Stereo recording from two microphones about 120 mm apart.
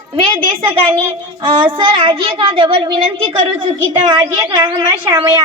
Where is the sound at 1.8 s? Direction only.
45° right (ahead or behind).